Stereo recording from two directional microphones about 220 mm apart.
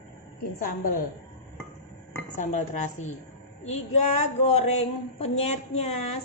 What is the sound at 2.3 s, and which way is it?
A woman's voice, 35° left (ahead or behind).